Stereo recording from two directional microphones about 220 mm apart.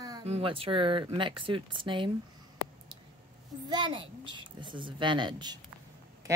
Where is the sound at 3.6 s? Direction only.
20° right (ahead or behind).